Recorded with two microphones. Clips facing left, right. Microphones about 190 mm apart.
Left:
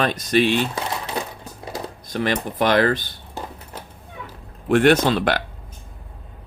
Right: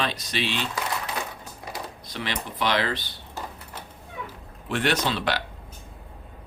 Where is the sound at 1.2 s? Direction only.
30° left (ahead or behind).